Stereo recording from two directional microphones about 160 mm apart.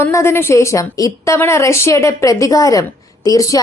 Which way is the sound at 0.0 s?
15° left (ahead or behind).